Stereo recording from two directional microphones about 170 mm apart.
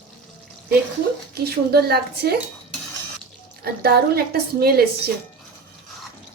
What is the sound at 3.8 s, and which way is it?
Speech, 65° right (ahead or behind).